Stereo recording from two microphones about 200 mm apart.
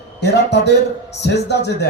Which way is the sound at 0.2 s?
55° left (ahead or behind).